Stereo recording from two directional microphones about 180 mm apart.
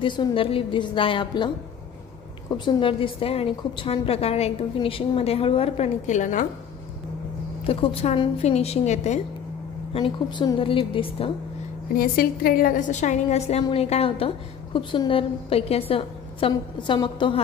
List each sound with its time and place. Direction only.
0.0 s a woman's voice: 25° left (ahead or behind)
2.5 s a woman's voice: 25° left (ahead or behind); by 6.4 s 45° left (ahead or behind)
7.6 s a woman's voice: 30° left (ahead or behind)
9.9 s a woman's voice: 30° left (ahead or behind)
11.9 s a woman's voice: 55° left (ahead or behind); by 17.4 s 25° left (ahead or behind)